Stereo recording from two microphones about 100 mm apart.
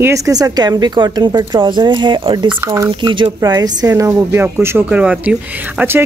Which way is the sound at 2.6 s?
30° right (ahead or behind).